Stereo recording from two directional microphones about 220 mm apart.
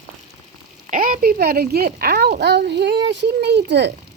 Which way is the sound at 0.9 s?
40° right (ahead or behind).